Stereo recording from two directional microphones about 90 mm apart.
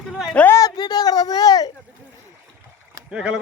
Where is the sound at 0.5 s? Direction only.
45° left (ahead or behind).